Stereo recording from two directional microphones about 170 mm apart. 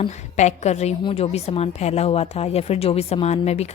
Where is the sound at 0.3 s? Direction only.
45° left (ahead or behind).